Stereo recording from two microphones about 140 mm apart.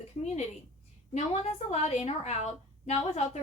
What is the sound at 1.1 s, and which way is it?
A woman's voice, 50° left (ahead or behind).